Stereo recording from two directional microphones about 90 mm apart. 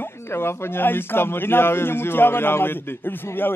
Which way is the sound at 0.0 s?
25° left (ahead or behind).